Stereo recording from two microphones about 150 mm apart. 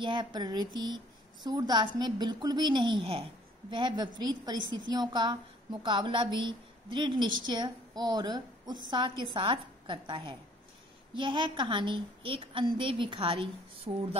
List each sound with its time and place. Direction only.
0.0 s a woman's voice: 30° right (ahead or behind)